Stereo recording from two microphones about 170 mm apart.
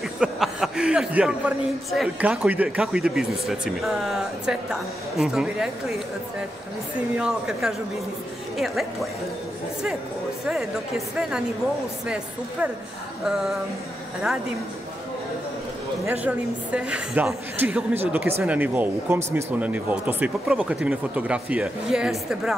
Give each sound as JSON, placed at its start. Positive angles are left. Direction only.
{"t": 0.2, "sound": "a man's voice", "side_deg": -5}
{"t": 7.2, "sound": "a man's voice", "side_deg": -5}
{"t": 11.1, "sound": "a man's voice", "side_deg": -5}
{"t": 16.1, "sound": "speech", "side_deg": -10}